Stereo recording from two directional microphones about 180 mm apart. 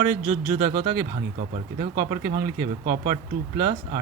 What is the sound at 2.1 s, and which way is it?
Speech, 45° right (ahead or behind).